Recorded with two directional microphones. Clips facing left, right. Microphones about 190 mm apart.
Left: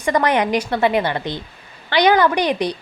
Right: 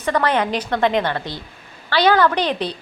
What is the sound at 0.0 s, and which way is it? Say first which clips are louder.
A woman's voice: left 2 dB; 15° left (ahead or behind).